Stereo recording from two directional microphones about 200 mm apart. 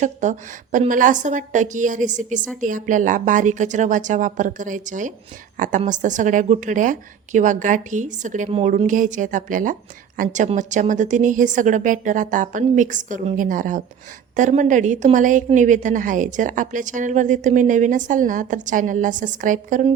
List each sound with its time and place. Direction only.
0.0 s a woman's voice: 35° right (ahead or behind)